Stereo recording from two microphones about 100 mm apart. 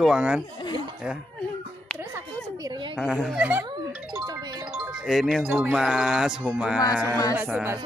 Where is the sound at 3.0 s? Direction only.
5° right (ahead or behind).